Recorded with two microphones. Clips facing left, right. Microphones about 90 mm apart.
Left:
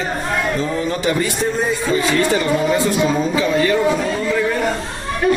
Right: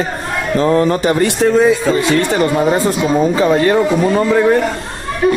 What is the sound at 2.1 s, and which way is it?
Speech, 45° right (ahead or behind).